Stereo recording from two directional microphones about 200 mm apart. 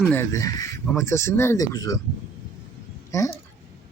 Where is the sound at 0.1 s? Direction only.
15° left (ahead or behind).